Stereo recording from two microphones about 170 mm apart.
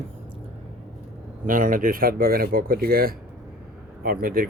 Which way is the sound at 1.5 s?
55° right (ahead or behind).